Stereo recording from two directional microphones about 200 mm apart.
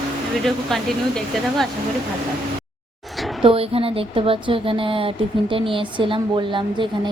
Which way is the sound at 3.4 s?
30° right (ahead or behind).